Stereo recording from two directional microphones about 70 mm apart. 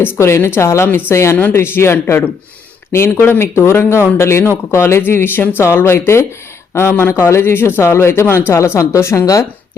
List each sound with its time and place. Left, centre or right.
0.0 s speech: left
9.2 s speech: left